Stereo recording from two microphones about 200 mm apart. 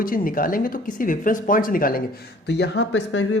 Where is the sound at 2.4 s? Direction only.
60° left (ahead or behind).